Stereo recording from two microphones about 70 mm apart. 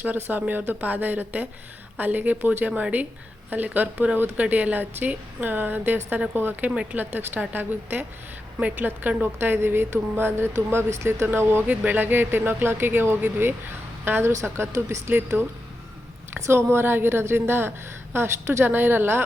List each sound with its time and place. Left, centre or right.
0.0 s a woman's voice: right
11.9 s speech: right